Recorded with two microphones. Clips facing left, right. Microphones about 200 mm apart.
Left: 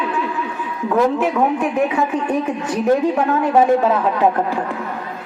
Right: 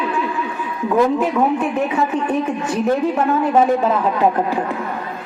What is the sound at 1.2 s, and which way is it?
Speech, 5° left (ahead or behind).